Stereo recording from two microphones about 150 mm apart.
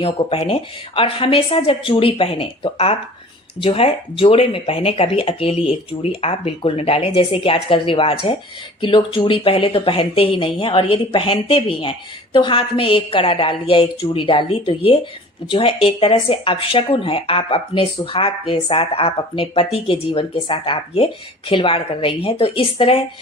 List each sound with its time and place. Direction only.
0.0 s speech: 40° left (ahead or behind)